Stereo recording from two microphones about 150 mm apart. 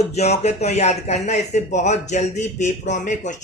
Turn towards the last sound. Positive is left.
turn(degrees=55)  # may be behind; listen again after turning